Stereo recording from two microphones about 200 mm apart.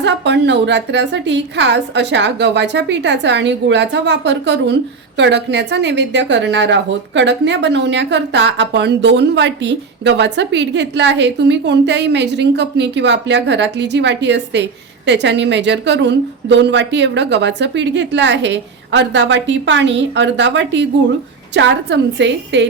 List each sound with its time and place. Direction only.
0.0 s a woman's voice: 60° right (ahead or behind)